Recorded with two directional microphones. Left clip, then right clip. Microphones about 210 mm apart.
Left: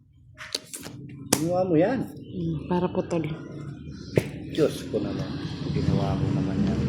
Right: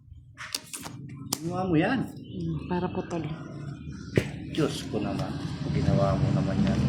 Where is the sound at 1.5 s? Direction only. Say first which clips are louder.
Left 3 dB; 40° right (ahead or behind).